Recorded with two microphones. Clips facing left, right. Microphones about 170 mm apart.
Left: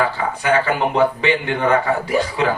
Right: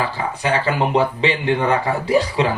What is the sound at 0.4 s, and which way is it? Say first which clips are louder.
Speech: left 3 dB; 30° right (ahead or behind).